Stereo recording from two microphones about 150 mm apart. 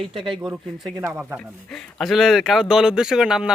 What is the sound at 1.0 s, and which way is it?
Speech, 10° right (ahead or behind).